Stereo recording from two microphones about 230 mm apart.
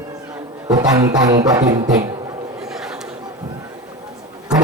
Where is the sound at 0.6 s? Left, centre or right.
Centre.